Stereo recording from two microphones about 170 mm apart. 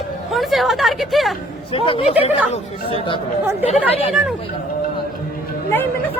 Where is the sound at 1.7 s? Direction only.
35° left (ahead or behind).